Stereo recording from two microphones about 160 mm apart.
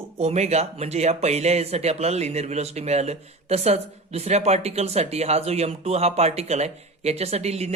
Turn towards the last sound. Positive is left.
turn(degrees=-40)  # may be behind; listen again after turning